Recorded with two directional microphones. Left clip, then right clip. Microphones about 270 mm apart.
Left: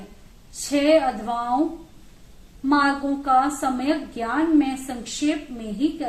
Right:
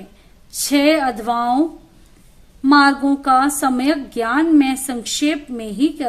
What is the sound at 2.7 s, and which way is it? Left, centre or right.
A woman's voice, right.